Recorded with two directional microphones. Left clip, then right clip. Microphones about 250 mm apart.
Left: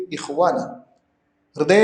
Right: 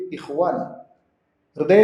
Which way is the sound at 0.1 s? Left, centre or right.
Centre.